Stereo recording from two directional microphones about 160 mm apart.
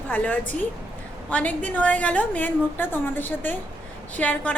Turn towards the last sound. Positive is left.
turn(degrees=10)  # may be behind; listen again after turning